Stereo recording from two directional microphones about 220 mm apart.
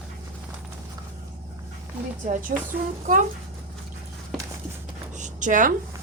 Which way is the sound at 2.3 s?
40° right (ahead or behind).